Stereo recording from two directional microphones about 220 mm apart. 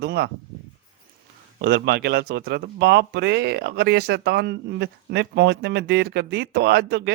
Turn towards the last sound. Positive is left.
turn(degrees=-50)  # may be behind; listen again after turning